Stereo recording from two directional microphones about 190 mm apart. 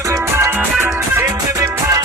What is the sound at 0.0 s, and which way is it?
Music, 15° right (ahead or behind).